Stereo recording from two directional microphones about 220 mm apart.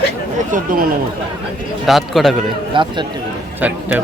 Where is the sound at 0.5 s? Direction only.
40° right (ahead or behind).